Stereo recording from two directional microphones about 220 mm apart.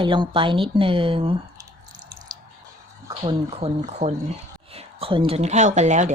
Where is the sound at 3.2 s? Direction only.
25° right (ahead or behind).